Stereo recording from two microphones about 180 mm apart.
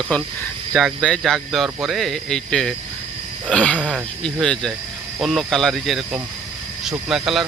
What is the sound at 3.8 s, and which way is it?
Speech, 5° right (ahead or behind).